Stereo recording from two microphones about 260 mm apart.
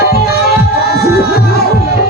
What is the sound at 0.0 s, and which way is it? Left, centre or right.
Music, left.